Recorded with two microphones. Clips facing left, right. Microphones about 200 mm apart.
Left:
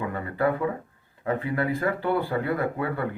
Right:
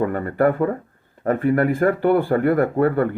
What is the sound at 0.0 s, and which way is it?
Speech, 45° right (ahead or behind).